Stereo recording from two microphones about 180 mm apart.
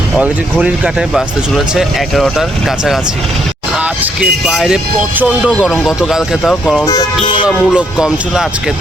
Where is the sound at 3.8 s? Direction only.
5° right (ahead or behind).